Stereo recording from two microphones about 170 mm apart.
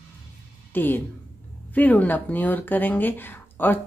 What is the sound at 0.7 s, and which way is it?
Speech, 10° left (ahead or behind).